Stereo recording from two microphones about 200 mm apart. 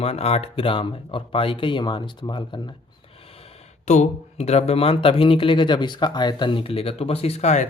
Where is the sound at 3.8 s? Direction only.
35° left (ahead or behind).